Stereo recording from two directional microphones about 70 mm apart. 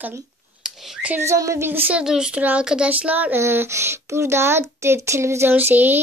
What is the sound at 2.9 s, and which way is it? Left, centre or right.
Speech, right.